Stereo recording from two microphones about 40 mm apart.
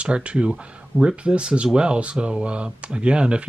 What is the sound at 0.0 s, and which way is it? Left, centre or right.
Speech, right.